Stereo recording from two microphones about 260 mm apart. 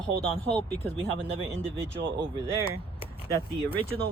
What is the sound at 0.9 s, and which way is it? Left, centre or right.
Speech, centre.